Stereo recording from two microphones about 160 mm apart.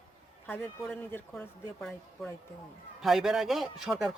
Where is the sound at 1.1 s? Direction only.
15° left (ahead or behind).